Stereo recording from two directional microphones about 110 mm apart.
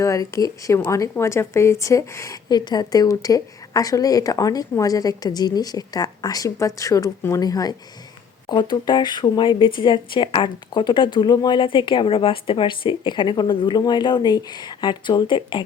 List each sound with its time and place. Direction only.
0.0 s speech: 30° left (ahead or behind); by 15.6 s 45° left (ahead or behind)